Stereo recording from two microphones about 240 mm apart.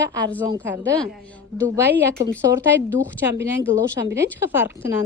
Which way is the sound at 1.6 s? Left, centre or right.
Centre.